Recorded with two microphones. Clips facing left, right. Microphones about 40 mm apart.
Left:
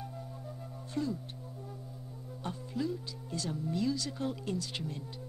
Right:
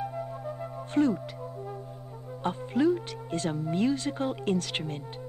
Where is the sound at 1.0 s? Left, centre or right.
Right.